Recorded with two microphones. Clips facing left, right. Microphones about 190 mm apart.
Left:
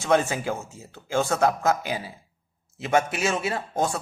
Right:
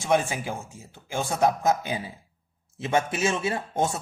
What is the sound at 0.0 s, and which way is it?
A man's voice, 15° right (ahead or behind).